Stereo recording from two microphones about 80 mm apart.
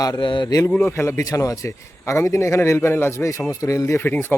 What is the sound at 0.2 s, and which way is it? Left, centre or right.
Speech, left.